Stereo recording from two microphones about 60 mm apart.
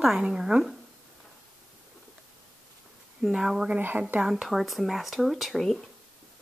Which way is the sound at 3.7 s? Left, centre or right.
Right.